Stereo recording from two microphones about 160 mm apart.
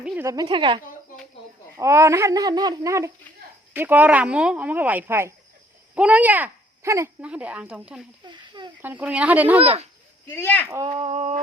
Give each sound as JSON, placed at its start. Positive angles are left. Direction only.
{"t": 0.2, "sound": "speech", "side_deg": -20}
{"t": 1.7, "sound": "speech", "side_deg": -20}
{"t": 8.3, "sound": "speech", "side_deg": -30}
{"t": 8.8, "sound": "speech", "side_deg": -10}
{"t": 10.2, "sound": "speech", "side_deg": 15}
{"t": 10.9, "sound": "a sound", "side_deg": -40}